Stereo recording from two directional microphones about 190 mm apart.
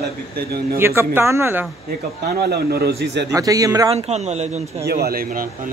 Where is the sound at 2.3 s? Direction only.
55° right (ahead or behind).